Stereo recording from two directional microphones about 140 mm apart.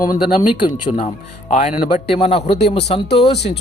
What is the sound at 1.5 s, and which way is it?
Speech, 60° left (ahead or behind).